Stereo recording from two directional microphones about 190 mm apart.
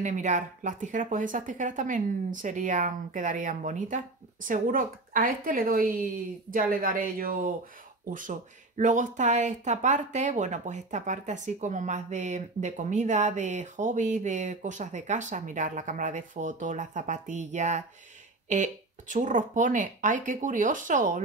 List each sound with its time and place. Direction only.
0.0 s speech: 40° right (ahead or behind)